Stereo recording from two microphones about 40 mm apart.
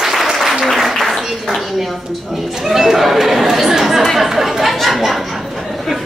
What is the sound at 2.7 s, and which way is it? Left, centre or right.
Chatter, centre.